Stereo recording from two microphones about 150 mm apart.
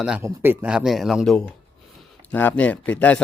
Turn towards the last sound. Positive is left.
turn(degrees=10)  # may be behind; listen again after turning